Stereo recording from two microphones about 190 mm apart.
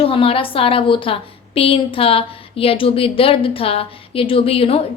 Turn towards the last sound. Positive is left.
turn(degrees=30)  # may be behind; listen again after turning